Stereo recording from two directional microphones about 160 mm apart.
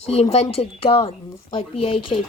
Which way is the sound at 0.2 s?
40° left (ahead or behind).